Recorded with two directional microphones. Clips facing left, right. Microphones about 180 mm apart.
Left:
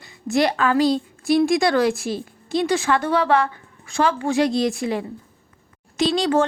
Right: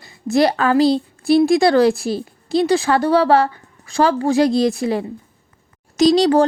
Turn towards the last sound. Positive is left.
turn(degrees=-35)  # may be behind; listen again after turning